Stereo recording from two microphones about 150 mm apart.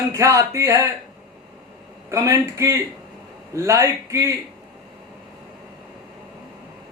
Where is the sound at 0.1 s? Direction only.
20° right (ahead or behind).